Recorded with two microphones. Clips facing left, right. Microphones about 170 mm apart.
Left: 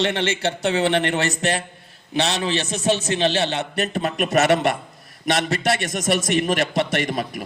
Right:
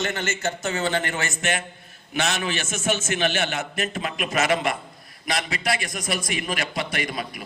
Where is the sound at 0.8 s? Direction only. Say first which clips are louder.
Left 5 dB; 70° left (ahead or behind).